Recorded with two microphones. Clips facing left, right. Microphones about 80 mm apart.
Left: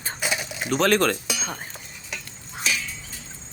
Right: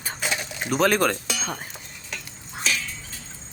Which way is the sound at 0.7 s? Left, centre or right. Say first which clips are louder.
Even; centre.